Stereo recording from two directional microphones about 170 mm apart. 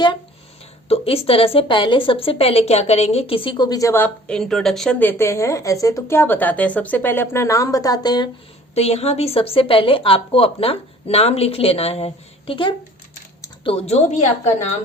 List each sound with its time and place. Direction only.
0.9 s a woman's voice: 35° left (ahead or behind)
8.7 s a woman's voice: 40° left (ahead or behind)